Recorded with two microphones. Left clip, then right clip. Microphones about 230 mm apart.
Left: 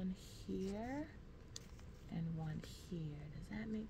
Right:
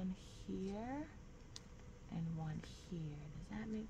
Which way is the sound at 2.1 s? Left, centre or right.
Centre.